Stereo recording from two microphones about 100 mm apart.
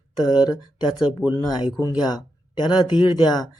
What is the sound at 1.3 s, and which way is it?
Speech, 45° left (ahead or behind).